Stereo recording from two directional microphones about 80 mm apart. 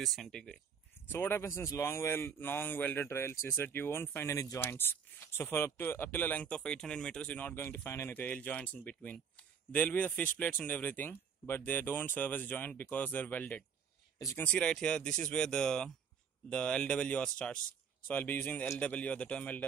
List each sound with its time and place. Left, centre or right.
0.0 s speech: centre
1.1 s speech: left
1.5 s speech: left
4.3 s speech: left
4.6 s speech: left
6.4 s speech: centre
7.5 s speech: left
8.1 s speech: left